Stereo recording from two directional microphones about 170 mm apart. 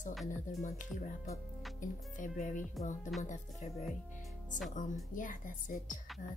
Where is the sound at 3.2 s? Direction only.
45° left (ahead or behind).